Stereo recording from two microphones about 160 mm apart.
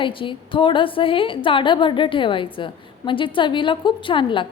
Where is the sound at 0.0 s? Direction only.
30° left (ahead or behind).